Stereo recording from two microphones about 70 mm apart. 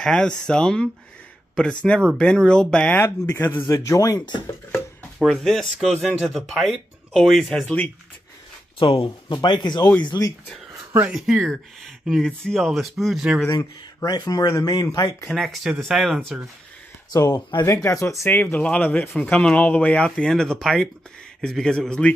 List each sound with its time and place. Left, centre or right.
0.0 s speech: centre
3.0 s speech: left
3.8 s speech: left
4.7 s chopping: centre
6.0 s speech: centre
9.3 s speech: left
10.1 s speech: left
11.1 s speech: centre
14.0 s speech: left
15.2 s speech: centre
17.1 s speech: left
17.6 s speech: left
18.3 s speech: left